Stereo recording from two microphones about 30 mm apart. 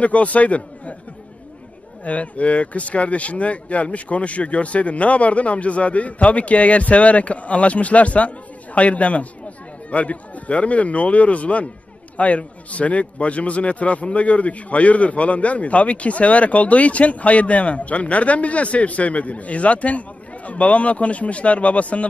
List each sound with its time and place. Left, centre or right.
0.0 s a man's voice: left
2.0 s a man's voice: left